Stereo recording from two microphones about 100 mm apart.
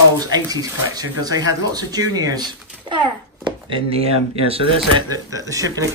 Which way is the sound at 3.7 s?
75° right (ahead or behind).